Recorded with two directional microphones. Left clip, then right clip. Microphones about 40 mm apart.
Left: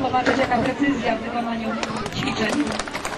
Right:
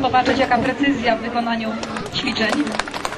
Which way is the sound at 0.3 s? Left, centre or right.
Left.